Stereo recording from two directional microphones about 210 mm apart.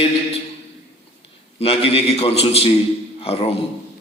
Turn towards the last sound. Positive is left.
turn(degrees=25)  # may be behind; listen again after turning